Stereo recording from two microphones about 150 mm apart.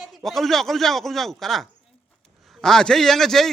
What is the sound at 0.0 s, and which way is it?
A man's voice, centre (ahead or behind).